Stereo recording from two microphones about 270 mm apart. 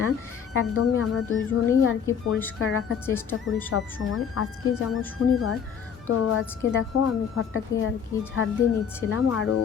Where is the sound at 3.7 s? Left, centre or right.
Left.